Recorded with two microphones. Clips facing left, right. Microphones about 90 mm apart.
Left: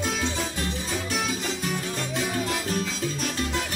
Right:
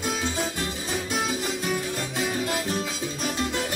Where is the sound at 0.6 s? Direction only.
10° right (ahead or behind).